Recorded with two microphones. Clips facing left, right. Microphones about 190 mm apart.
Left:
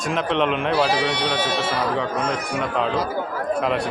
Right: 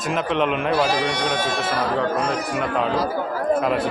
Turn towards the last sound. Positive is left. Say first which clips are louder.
# right 2 dB
turn(degrees=0)  # may be behind; listen again after turning